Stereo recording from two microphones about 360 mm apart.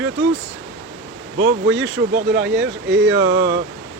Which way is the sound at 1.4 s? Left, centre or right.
Right.